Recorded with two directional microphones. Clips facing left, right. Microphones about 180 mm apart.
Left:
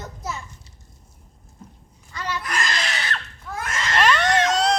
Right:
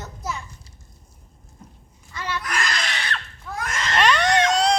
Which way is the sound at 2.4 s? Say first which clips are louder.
Even; centre (ahead or behind).